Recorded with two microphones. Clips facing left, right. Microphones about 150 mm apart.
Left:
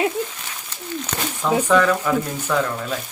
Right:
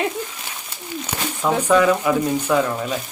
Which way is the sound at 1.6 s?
10° right (ahead or behind).